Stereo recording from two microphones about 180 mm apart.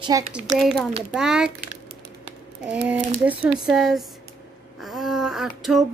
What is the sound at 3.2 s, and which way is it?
Speech, 10° right (ahead or behind).